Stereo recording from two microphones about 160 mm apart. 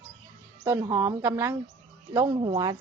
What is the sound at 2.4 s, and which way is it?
Speech, 30° right (ahead or behind).